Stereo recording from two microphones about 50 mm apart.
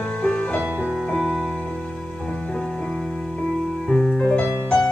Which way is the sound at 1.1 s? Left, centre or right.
Centre.